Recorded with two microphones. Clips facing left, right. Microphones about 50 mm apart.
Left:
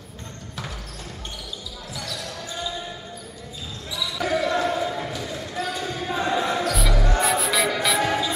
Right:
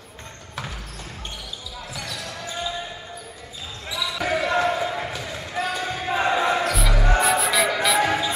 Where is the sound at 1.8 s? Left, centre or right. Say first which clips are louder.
Even; right.